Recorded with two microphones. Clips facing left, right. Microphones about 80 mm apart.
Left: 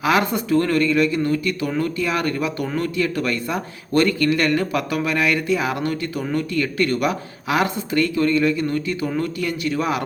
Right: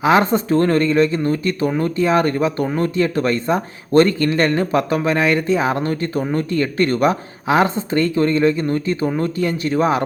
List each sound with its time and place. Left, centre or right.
0.0 s speech: right